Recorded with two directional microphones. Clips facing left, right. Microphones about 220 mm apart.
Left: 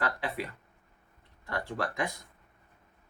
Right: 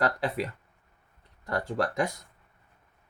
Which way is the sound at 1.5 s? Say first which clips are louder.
Right 5 dB; 40° right (ahead or behind).